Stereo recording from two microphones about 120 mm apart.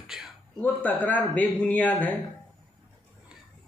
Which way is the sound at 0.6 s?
15° left (ahead or behind).